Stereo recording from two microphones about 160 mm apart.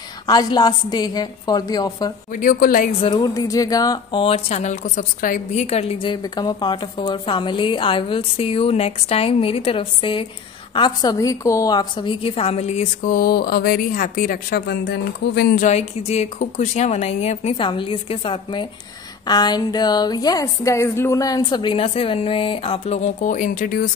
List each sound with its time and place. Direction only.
0.3 s speech: 25° left (ahead or behind)
2.3 s a woman's voice: 60° left (ahead or behind)
3.0 s a woman's voice: 25° left (ahead or behind)
6.2 s a woman's voice: 25° left (ahead or behind); by 13.1 s 40° left (ahead or behind)
13.1 s a woman's voice: 65° left (ahead or behind); by 15.6 s 90° left
15.6 s a woman's voice: 45° left (ahead or behind); by 23.9 s 60° left (ahead or behind)